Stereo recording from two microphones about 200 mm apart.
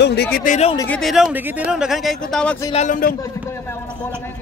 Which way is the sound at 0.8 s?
5° left (ahead or behind).